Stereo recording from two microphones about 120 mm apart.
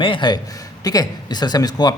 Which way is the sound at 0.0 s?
45° left (ahead or behind).